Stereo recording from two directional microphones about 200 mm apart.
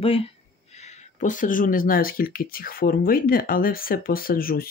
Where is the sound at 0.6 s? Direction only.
35° left (ahead or behind).